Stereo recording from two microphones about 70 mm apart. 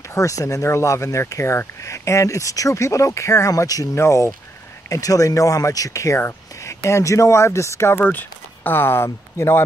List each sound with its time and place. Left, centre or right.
0.1 s speech: left
3.9 s speech: left
4.8 s speech: left
8.0 s speech: left